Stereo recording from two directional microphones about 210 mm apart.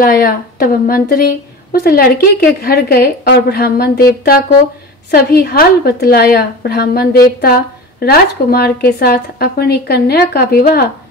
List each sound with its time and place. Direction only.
0.0 s a woman's voice: 45° left (ahead or behind)